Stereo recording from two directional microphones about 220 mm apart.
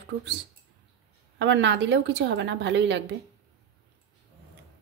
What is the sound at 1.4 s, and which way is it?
A woman's voice, 55° right (ahead or behind).